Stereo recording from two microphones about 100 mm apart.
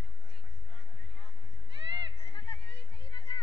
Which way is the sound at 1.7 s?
50° right (ahead or behind).